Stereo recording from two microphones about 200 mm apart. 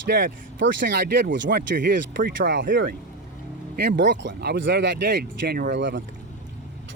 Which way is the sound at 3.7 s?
55° right (ahead or behind).